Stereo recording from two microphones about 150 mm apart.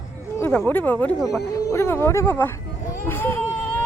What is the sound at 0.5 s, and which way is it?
A child's voice, 10° left (ahead or behind).